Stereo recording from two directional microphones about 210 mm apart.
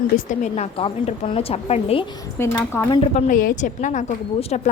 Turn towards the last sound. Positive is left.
turn(degrees=30)  # may be behind; listen again after turning